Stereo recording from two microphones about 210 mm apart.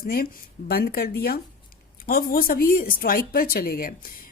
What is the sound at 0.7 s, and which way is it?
A woman's voice, 45° left (ahead or behind).